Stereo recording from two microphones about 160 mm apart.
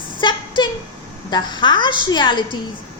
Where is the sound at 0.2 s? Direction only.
30° left (ahead or behind).